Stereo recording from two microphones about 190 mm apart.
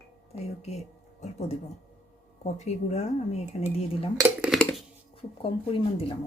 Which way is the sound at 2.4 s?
35° left (ahead or behind).